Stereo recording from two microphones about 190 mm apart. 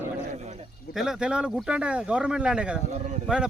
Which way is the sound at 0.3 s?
35° right (ahead or behind).